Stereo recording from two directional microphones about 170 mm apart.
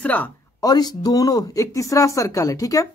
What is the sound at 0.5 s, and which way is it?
Speech, 25° left (ahead or behind).